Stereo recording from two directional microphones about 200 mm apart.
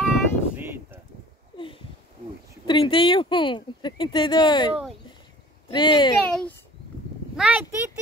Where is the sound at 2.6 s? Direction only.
25° left (ahead or behind).